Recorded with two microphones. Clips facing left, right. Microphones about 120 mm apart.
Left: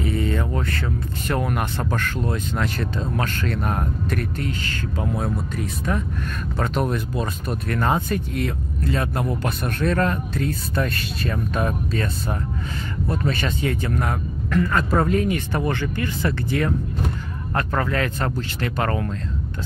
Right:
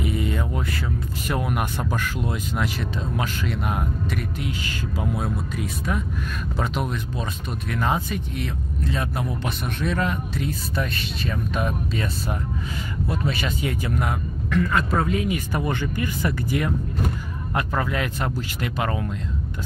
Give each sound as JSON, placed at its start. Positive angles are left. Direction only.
{"t": 0.0, "sound": "speech", "side_deg": -15}
{"t": 13.1, "sound": "speech", "side_deg": -5}